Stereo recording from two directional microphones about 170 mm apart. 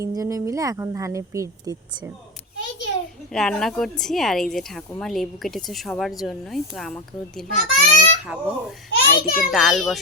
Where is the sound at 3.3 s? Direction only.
5° left (ahead or behind).